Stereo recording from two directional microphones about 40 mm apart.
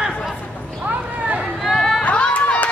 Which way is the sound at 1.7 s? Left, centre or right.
Centre.